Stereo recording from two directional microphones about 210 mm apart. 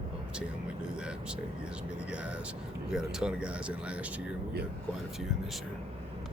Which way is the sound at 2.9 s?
5° right (ahead or behind).